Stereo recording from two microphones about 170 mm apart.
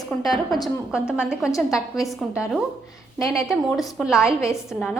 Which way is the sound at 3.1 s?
20° left (ahead or behind).